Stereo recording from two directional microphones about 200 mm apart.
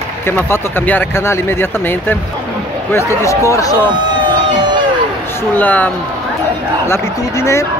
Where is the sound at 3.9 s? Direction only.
20° right (ahead or behind).